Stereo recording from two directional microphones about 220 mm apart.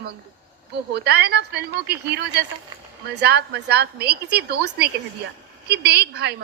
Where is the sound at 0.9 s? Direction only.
45° right (ahead or behind).